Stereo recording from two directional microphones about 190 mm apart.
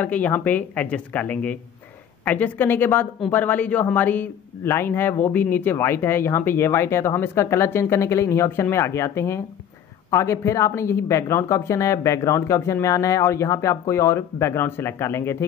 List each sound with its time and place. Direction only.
0.0 s speech: 10° left (ahead or behind)